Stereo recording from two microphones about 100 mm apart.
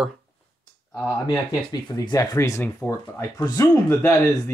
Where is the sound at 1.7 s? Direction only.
45° left (ahead or behind).